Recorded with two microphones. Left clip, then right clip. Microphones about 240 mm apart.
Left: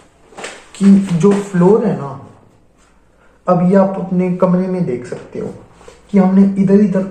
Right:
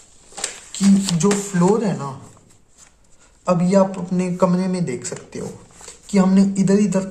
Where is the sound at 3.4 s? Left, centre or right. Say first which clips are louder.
Left 5 dB; right.